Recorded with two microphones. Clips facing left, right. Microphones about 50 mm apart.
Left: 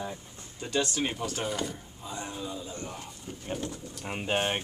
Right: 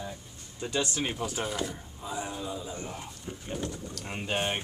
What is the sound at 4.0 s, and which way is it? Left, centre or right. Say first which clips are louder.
Speech: left 3 dB; centre.